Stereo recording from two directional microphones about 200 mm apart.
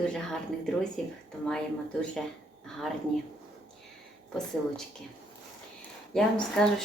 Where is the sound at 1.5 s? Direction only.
5° left (ahead or behind).